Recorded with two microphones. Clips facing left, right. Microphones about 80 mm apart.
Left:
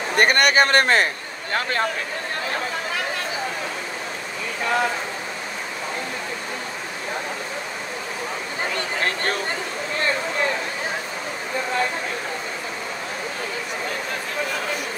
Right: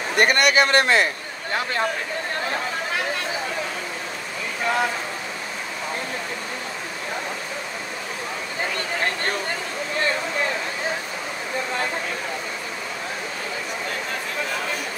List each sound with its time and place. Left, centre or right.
0.2 s speech: left